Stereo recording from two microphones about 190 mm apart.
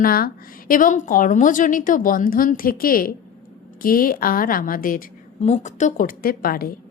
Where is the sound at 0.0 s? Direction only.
50° left (ahead or behind).